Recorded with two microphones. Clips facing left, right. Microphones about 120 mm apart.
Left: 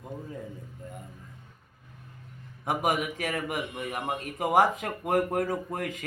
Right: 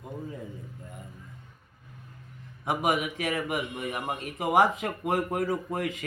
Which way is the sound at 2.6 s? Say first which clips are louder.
Even; 45° left (ahead or behind).